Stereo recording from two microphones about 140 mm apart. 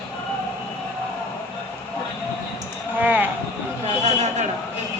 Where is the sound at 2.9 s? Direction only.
10° right (ahead or behind).